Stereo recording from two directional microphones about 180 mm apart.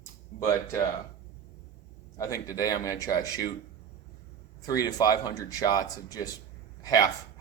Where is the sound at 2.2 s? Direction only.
15° left (ahead or behind).